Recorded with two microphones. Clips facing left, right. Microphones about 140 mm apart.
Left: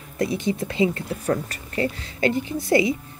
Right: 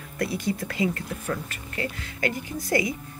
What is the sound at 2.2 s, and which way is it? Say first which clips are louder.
Speech: left 6 dB; 25° left (ahead or behind).